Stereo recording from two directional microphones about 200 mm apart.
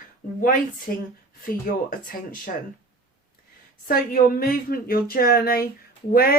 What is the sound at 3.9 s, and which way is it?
Speech, 45° left (ahead or behind).